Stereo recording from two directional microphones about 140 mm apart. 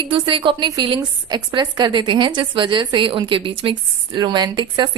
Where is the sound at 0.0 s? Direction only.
35° right (ahead or behind).